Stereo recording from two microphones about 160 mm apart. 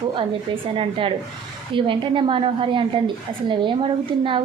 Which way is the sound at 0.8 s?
35° right (ahead or behind).